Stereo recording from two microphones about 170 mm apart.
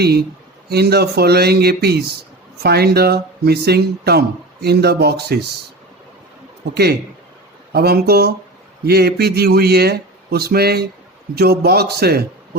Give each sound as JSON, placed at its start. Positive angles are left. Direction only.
{"t": 0.0, "sound": "a man's voice", "side_deg": -70}
{"t": 7.7, "sound": "a man's voice", "side_deg": -65}